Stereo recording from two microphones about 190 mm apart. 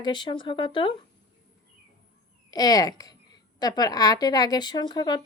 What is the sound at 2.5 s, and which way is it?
A woman's voice, 20° left (ahead or behind).